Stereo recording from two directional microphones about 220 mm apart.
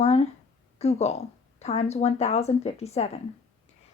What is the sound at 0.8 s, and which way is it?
Speech, 30° left (ahead or behind).